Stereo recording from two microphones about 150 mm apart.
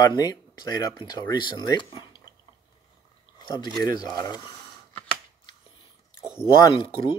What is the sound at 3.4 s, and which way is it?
Speech, 30° left (ahead or behind).